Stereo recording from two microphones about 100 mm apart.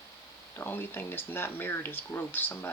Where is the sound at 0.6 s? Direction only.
20° left (ahead or behind).